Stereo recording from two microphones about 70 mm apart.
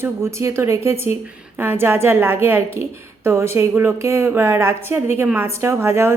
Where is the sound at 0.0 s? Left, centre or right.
Right.